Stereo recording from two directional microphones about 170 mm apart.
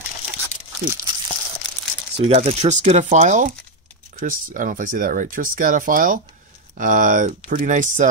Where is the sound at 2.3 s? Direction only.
40° right (ahead or behind).